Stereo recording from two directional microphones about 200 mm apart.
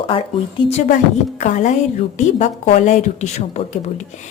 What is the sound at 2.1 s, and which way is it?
A woman's voice, 35° left (ahead or behind).